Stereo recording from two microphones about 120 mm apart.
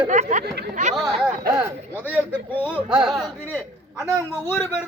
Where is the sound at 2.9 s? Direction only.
5° right (ahead or behind).